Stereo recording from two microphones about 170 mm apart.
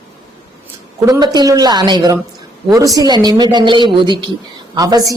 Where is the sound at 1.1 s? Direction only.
25° right (ahead or behind).